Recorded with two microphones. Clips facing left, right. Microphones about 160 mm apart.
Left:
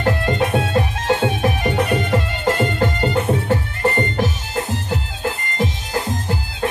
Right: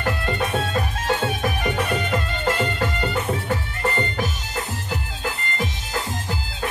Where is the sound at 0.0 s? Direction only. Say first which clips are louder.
Left 6 dB; 35° left (ahead or behind).